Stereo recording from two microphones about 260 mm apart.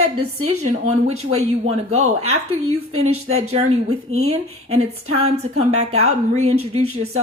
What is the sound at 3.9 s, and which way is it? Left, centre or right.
Speech, right.